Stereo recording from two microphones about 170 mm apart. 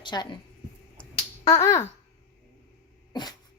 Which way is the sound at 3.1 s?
25° left (ahead or behind).